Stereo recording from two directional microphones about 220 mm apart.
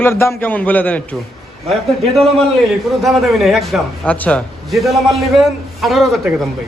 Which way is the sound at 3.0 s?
Centre (ahead or behind).